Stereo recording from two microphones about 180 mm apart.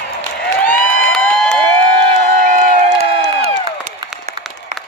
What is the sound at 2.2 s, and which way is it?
Crowd, 45° right (ahead or behind).